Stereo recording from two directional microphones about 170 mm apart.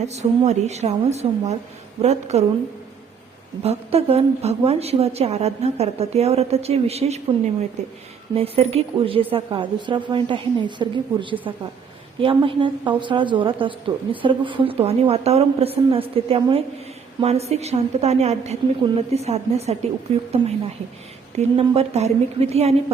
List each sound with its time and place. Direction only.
0.0 s a woman's voice: 40° right (ahead or behind)
3.6 s a woman's voice: 35° right (ahead or behind)
21.3 s a woman's voice: 35° right (ahead or behind)